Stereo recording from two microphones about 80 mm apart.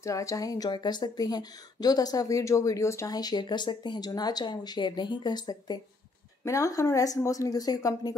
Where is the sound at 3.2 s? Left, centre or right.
Left.